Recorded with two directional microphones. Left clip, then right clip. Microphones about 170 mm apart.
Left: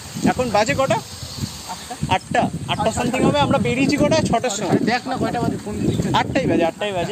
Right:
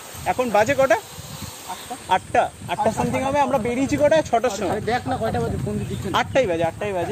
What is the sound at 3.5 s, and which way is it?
Speech, 30° left (ahead or behind).